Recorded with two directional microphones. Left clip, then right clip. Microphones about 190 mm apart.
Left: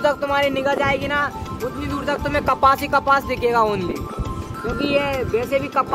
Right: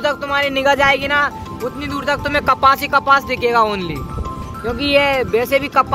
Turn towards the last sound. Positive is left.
turn(degrees=-15)  # may be behind; listen again after turning